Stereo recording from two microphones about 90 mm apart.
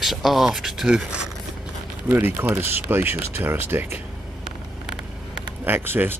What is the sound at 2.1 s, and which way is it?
Speech, 25° right (ahead or behind).